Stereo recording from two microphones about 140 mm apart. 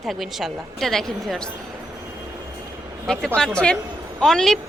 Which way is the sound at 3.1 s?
5° left (ahead or behind).